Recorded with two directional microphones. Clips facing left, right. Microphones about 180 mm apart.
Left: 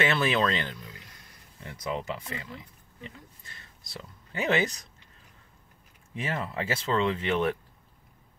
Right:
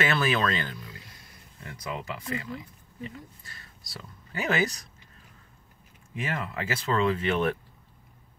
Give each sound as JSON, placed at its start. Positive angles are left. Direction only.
{"t": 0.0, "sound": "speech", "side_deg": 25}
{"t": 6.1, "sound": "speech", "side_deg": 25}